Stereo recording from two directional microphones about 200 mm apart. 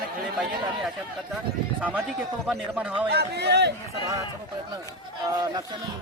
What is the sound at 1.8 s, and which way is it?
A man's voice, 10° right (ahead or behind).